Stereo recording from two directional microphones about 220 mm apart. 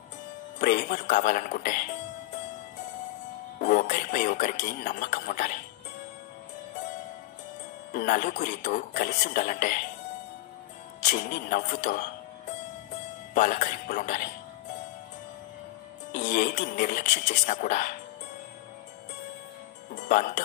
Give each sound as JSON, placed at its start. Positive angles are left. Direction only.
{"t": 0.6, "sound": "speech", "side_deg": 35}
{"t": 3.6, "sound": "speech", "side_deg": 35}
{"t": 7.9, "sound": "speech", "side_deg": 40}
{"t": 11.0, "sound": "speech", "side_deg": 35}
{"t": 13.3, "sound": "speech", "side_deg": 35}
{"t": 16.2, "sound": "speech", "side_deg": 35}
{"t": 20.0, "sound": "speech", "side_deg": 35}